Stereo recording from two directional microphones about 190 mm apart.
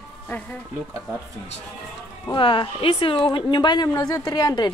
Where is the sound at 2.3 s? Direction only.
25° left (ahead or behind).